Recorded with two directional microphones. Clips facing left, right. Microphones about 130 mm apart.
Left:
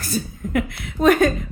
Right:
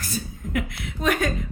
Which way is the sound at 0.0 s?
35° left (ahead or behind).